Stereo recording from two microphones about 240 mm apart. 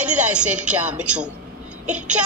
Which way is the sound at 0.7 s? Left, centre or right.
Centre.